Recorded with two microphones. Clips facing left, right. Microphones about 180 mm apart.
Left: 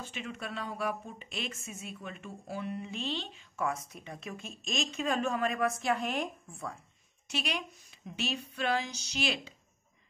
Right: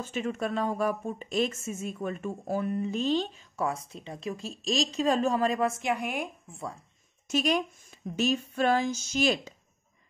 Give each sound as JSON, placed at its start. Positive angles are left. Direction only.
{"t": 0.0, "sound": "speech", "side_deg": -45}
{"t": 6.5, "sound": "speech", "side_deg": -30}
{"t": 7.2, "sound": "speech", "side_deg": -45}